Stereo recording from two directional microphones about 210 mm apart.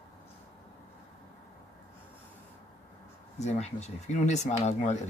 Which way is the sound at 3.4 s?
30° left (ahead or behind).